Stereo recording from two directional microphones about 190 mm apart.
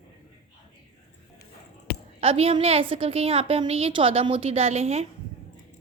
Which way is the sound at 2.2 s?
30° right (ahead or behind).